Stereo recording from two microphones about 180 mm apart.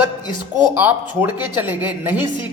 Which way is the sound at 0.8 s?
10° right (ahead or behind).